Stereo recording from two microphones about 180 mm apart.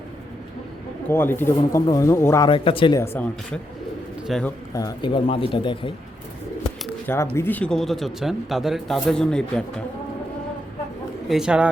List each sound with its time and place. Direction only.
1.1 s speech: 10° left (ahead or behind)
2.5 s speech: 30° left (ahead or behind)
3.0 s speech: 10° left (ahead or behind)
4.7 s speech: 20° left (ahead or behind)
7.1 s speech: 15° left (ahead or behind)
11.3 s speech: 5° right (ahead or behind)